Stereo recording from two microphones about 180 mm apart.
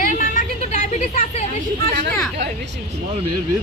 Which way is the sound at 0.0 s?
45° left (ahead or behind).